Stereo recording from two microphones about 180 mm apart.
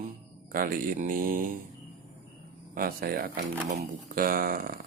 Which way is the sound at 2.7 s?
55° right (ahead or behind).